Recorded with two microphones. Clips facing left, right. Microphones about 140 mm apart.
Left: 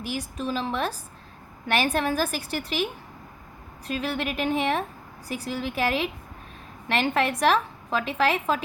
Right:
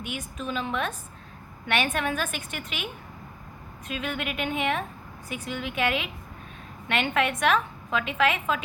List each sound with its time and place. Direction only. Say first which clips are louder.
0.0 s a woman's voice: left 4 dB; 35° left (ahead or behind)